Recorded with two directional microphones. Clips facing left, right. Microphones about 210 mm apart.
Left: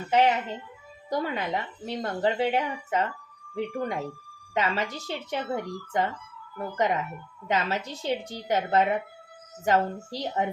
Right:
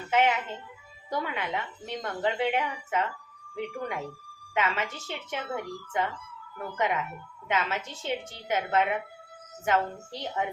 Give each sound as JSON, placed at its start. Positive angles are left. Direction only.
{"t": 0.1, "sound": "a woman's voice", "side_deg": 35}